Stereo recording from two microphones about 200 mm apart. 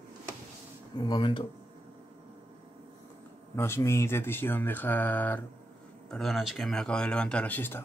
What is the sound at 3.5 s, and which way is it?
Speech, 15° left (ahead or behind).